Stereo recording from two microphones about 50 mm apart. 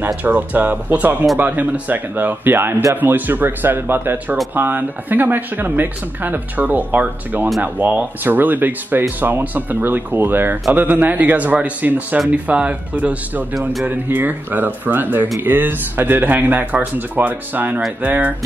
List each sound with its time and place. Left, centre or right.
0.2 s speech: right
10.7 s speech: right
13.8 s speech: right